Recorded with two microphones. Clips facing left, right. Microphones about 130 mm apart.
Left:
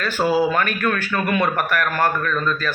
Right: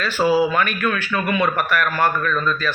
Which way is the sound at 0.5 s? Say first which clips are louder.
Even; 45° left (ahead or behind).